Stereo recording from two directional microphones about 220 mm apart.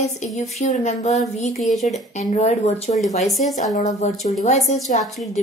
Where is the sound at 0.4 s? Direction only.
30° left (ahead or behind).